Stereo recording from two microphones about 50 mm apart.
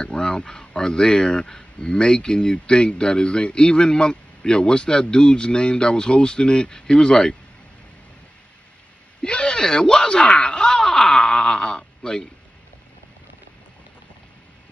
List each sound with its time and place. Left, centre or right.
0.0 s speech: centre
9.2 s groan: centre